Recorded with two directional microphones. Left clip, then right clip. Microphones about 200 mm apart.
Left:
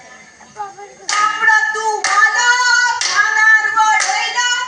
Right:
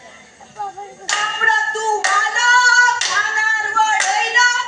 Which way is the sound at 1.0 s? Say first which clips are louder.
Left 3 dB; 40° left (ahead or behind).